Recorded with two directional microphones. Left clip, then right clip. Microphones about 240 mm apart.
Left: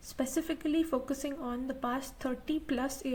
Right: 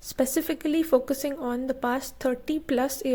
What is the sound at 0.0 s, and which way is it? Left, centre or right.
A woman's voice, right.